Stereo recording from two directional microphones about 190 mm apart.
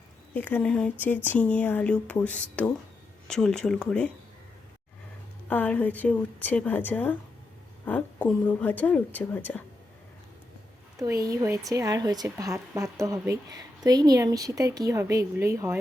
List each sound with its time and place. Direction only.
0.3 s a woman's voice: 10° left (ahead or behind)
5.5 s a woman's voice: 10° left (ahead or behind)
11.0 s a woman's voice: 20° right (ahead or behind)